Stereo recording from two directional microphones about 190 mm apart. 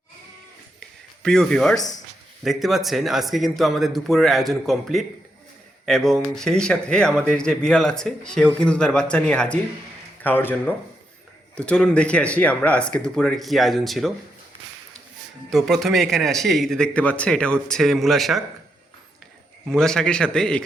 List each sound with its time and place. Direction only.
1.2 s speech: 5° left (ahead or behind)
15.4 s speech: centre (ahead or behind)
19.6 s speech: 5° left (ahead or behind)